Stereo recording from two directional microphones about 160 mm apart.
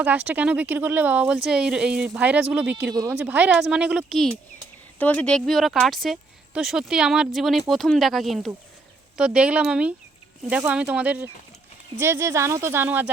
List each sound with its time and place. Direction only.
0.0 s speech: 10° right (ahead or behind)
2.9 s speech: 25° right (ahead or behind)
3.2 s speech: 10° right (ahead or behind)